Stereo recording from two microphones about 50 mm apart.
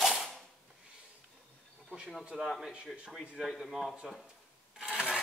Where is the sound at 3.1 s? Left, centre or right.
Centre.